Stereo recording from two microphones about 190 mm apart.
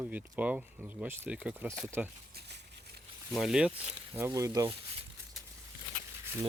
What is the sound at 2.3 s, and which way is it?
Patter, 60° right (ahead or behind).